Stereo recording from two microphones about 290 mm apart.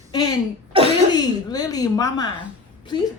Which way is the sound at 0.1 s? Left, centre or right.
Centre.